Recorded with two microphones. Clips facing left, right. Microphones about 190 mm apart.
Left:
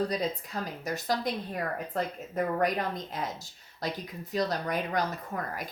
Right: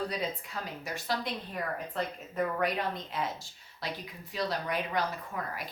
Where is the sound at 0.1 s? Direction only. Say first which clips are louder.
Left 4 dB; 40° left (ahead or behind).